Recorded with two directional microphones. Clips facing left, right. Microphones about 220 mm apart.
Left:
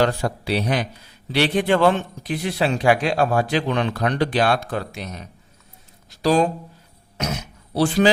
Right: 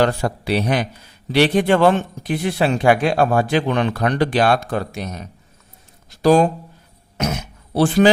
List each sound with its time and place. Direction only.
0.0 s a man's voice: 55° right (ahead or behind)
6.2 s a man's voice: 50° right (ahead or behind)
7.7 s a man's voice: 50° right (ahead or behind)